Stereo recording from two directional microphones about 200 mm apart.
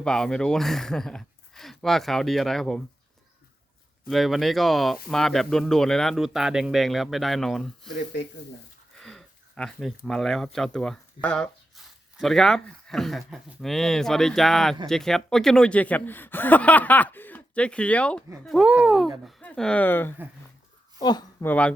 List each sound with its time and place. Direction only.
0.0 s speech: 5° left (ahead or behind)
4.0 s speech: centre (ahead or behind)
9.0 s speech: 5° left (ahead or behind); by 21.2 s 20° left (ahead or behind)
21.4 s speech: 10° left (ahead or behind)